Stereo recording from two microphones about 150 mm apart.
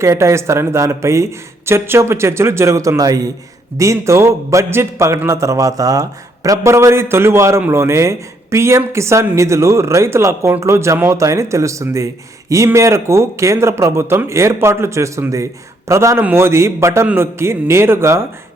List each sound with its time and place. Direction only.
0.0 s a man's voice: 20° right (ahead or behind)